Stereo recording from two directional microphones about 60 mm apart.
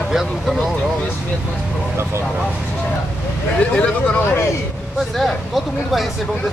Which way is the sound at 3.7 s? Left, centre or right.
Left.